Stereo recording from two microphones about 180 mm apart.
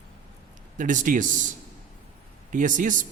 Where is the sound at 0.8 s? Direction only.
45° right (ahead or behind).